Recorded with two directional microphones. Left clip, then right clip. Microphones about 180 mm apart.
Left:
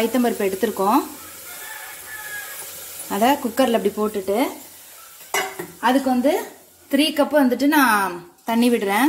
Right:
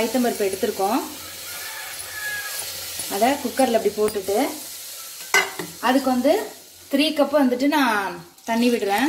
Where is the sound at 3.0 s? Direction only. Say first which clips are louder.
Left 2 dB; 45° left (ahead or behind).